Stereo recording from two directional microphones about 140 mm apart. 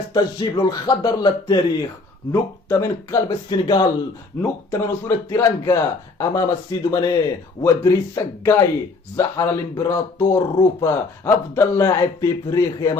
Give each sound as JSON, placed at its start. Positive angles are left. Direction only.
{"t": 0.1, "sound": "speech", "side_deg": 30}
{"t": 2.3, "sound": "speech", "side_deg": 20}
{"t": 4.4, "sound": "speech", "side_deg": 15}